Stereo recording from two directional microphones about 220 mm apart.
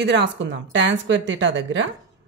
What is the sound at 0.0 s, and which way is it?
A woman's voice, 50° right (ahead or behind).